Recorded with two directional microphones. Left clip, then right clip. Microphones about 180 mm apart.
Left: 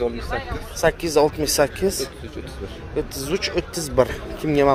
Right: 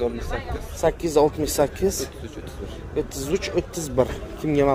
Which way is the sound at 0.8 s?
15° right (ahead or behind).